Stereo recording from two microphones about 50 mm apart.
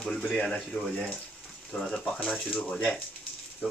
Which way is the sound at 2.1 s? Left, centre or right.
Left.